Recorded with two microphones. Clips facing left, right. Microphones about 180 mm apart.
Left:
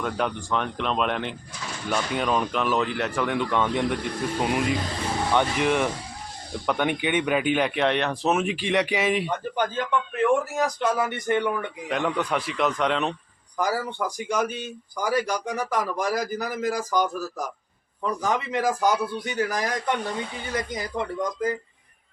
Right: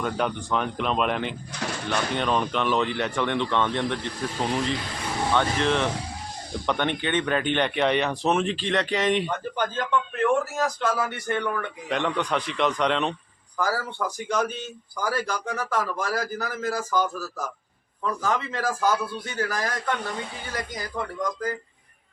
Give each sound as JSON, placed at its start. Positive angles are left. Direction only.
{"t": 0.0, "sound": "a man's voice", "side_deg": 0}
{"t": 11.9, "sound": "speech", "side_deg": 5}
{"t": 13.6, "sound": "a man's voice", "side_deg": 15}